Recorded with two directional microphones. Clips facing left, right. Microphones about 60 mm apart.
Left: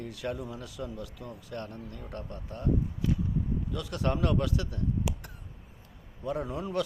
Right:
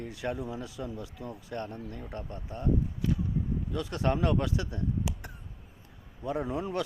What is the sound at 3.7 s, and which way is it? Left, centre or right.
Speech, right.